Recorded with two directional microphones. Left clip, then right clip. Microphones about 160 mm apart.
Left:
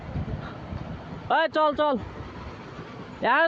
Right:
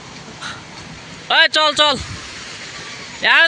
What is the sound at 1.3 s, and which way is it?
Speech, 5° left (ahead or behind).